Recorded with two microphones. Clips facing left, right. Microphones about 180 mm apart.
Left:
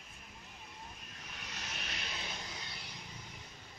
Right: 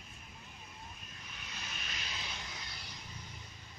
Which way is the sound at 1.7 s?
70° left (ahead or behind).